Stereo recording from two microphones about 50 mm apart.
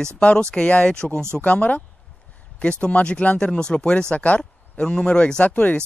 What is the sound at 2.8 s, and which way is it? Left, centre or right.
Speech, left.